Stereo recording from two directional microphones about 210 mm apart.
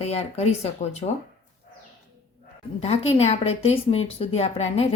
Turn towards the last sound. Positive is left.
turn(degrees=30)  # may be behind; listen again after turning